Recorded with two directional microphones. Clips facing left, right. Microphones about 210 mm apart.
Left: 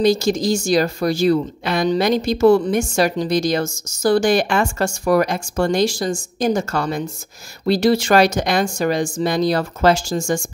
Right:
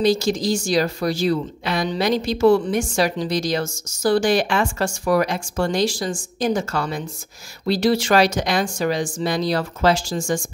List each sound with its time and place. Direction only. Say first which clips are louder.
0.0 s a woman's voice: left 2 dB; 45° left (ahead or behind)